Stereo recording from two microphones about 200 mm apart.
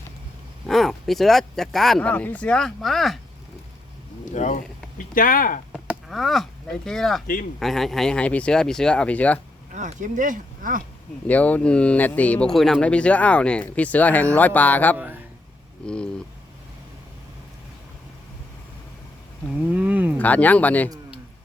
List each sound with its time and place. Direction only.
0.7 s speech: centre (ahead or behind)
4.3 s speech: 40° left (ahead or behind)
5.7 s speech: centre (ahead or behind)
9.7 s speech: 40° right (ahead or behind)
11.3 s speech: 10° left (ahead or behind)
14.9 s speech: 10° right (ahead or behind)
15.8 s speech: 5° left (ahead or behind)
19.7 s a sound: 5° right (ahead or behind)
20.1 s speech: 10° left (ahead or behind)